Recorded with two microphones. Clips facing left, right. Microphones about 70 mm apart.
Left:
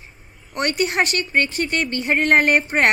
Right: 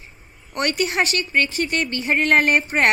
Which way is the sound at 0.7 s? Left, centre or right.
Left.